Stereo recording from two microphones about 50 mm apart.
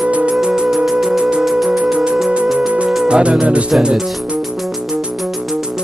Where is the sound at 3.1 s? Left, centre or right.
Centre.